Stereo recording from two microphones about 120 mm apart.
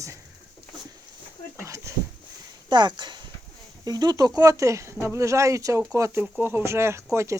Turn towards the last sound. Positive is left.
turn(degrees=-25)  # may be behind; listen again after turning